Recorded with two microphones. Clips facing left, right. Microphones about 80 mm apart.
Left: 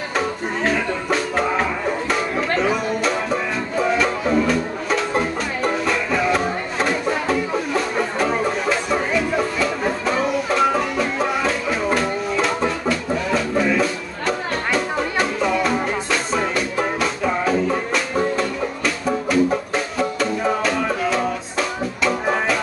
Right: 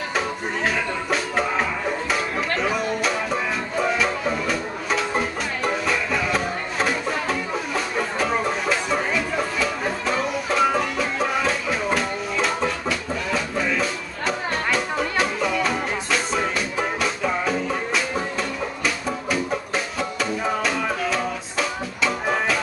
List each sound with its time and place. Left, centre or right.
0.7 s music: centre